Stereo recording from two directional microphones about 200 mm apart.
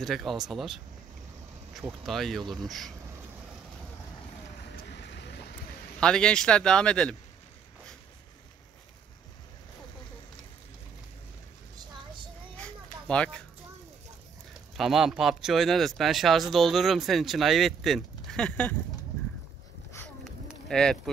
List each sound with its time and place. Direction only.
0.0 s speech: centre (ahead or behind)
4.9 s vehicle: 60° left (ahead or behind)
5.9 s speech: 5° left (ahead or behind)
12.5 s a sound: 5° left (ahead or behind)
14.8 s speech: centre (ahead or behind)
20.6 s speech: 5° left (ahead or behind)